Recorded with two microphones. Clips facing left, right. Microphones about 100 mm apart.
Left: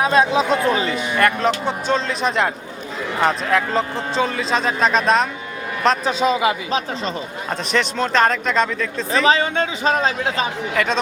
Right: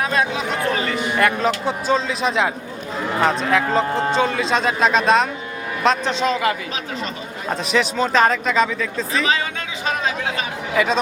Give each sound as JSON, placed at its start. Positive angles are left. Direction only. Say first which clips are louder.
{"t": 0.0, "sound": "speech", "louder": "left 5 dB", "side_deg": 20}
{"t": 1.6, "sound": "speech", "louder": "right 1 dB", "side_deg": 0}
{"t": 6.7, "sound": "a man's voice", "louder": "left 5 dB", "side_deg": 30}
{"t": 7.5, "sound": "speech", "louder": "right 1 dB", "side_deg": -5}
{"t": 9.2, "sound": "a man's voice", "louder": "left 5 dB", "side_deg": 35}
{"t": 10.8, "sound": "speech", "louder": "right 2 dB", "side_deg": -5}